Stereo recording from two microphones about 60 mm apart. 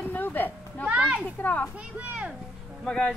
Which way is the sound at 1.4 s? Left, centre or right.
Left.